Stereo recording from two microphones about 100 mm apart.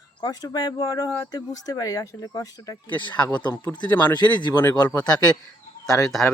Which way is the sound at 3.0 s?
50° left (ahead or behind).